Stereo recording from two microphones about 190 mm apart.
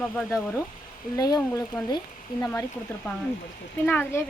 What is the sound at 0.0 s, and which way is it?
Speech, 10° left (ahead or behind).